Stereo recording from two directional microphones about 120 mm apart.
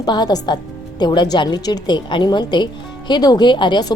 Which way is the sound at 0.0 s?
35° left (ahead or behind).